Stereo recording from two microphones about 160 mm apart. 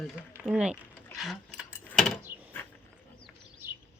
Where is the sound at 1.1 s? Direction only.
Centre (ahead or behind).